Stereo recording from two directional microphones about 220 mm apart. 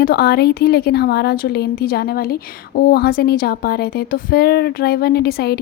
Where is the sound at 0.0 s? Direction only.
45° left (ahead or behind).